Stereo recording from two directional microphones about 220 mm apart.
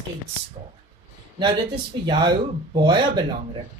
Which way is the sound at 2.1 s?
20° right (ahead or behind).